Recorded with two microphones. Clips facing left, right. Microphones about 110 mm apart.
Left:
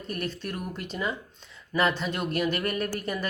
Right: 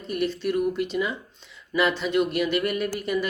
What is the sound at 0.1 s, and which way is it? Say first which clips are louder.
Speech: right 8 dB; 45° left (ahead or behind).